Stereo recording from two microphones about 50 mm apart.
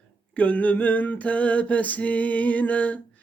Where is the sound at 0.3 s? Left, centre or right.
Left.